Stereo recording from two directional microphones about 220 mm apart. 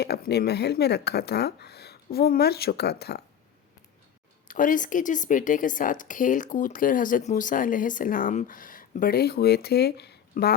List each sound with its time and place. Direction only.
0.0 s speech: 45° left (ahead or behind)
4.4 s speech: 35° left (ahead or behind)